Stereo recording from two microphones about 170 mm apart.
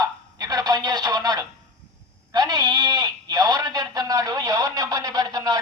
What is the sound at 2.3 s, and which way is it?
Sheep, 25° right (ahead or behind).